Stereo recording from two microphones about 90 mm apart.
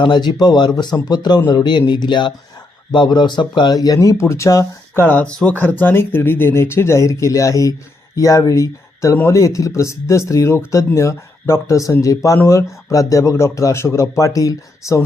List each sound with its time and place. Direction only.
0.0 s speech: 55° left (ahead or behind); by 4.6 s 35° left (ahead or behind)
4.9 s speech: 20° left (ahead or behind); by 15.0 s 35° left (ahead or behind)